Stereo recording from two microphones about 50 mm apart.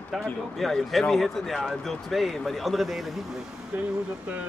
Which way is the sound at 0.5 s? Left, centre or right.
Centre.